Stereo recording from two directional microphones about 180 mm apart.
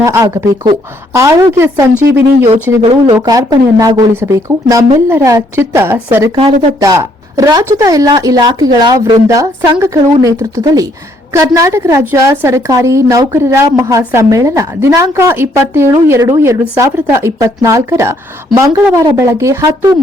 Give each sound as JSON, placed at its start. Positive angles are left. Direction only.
{"t": 0.0, "sound": "a woman's voice", "side_deg": -15}
{"t": 2.5, "sound": "speech", "side_deg": -30}
{"t": 3.2, "sound": "a woman's voice", "side_deg": -20}
{"t": 6.3, "sound": "speech", "side_deg": -30}
{"t": 6.7, "sound": "a woman's voice", "side_deg": -20}